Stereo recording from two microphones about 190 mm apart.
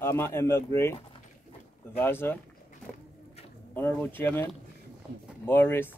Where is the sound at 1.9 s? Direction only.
10° left (ahead or behind).